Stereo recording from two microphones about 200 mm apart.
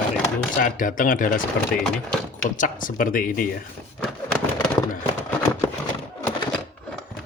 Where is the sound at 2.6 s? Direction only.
40° left (ahead or behind).